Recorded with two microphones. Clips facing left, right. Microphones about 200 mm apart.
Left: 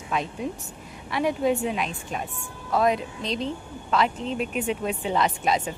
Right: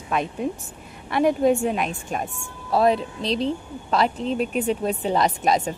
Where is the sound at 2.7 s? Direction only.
30° right (ahead or behind).